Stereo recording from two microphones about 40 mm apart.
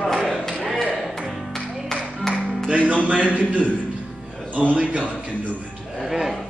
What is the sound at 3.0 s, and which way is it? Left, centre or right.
Speech, right.